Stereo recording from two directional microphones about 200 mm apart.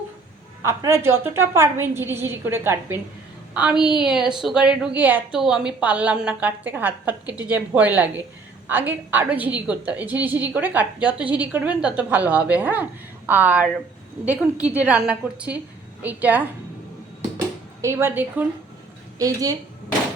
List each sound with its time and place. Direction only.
0.6 s a woman's voice: 15° right (ahead or behind)
17.8 s a woman's voice: 10° right (ahead or behind)